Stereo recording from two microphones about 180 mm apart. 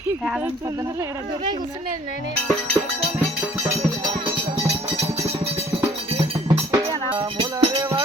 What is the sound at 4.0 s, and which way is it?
Music, 25° right (ahead or behind).